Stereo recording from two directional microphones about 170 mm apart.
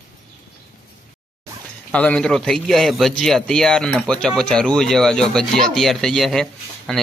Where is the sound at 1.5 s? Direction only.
20° right (ahead or behind).